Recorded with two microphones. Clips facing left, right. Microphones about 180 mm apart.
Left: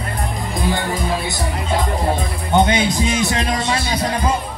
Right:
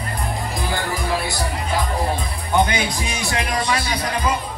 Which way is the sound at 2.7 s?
25° left (ahead or behind).